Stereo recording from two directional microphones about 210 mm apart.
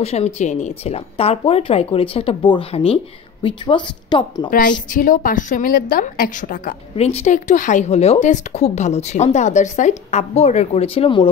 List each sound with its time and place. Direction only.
0.0 s speech: 30° left (ahead or behind)
4.5 s a woman's voice: 40° left (ahead or behind)